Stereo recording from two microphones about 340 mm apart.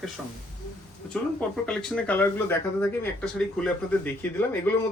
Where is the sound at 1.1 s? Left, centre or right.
Centre.